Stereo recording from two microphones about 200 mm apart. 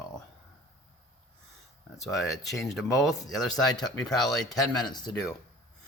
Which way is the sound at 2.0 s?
Centre (ahead or behind).